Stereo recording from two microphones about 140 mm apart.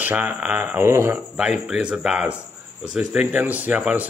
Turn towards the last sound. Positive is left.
turn(degrees=-10)  # may be behind; listen again after turning